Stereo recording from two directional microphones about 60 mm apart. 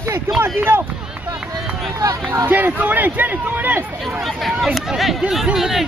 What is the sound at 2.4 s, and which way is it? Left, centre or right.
Speech, right.